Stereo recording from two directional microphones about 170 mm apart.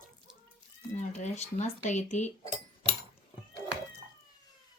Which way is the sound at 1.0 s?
40° left (ahead or behind).